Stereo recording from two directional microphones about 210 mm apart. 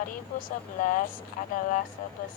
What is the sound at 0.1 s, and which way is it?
Speech, 40° left (ahead or behind).